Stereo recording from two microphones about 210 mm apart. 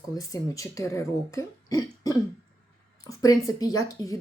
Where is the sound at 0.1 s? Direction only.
15° left (ahead or behind).